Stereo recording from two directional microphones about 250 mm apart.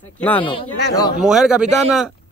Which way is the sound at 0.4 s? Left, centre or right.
Centre.